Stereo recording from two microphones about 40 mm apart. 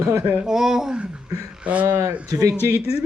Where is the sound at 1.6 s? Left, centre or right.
Right.